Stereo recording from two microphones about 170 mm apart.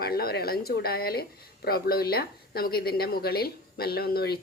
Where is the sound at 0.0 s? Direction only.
65° left (ahead or behind).